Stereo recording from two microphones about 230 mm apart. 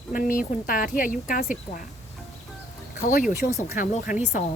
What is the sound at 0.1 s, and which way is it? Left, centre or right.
A woman's voice, left.